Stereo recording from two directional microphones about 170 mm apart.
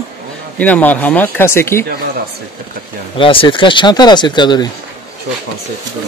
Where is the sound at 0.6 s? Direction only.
10° left (ahead or behind).